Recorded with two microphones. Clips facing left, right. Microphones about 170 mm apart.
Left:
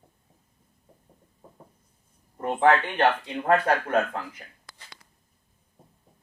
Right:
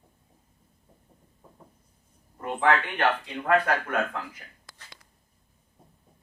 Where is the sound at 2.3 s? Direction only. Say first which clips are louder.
Left 3 dB; 35° left (ahead or behind).